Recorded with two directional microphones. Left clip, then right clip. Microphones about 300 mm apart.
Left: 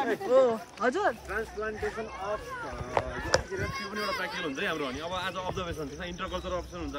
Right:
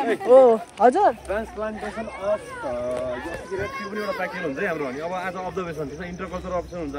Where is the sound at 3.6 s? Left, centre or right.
Centre.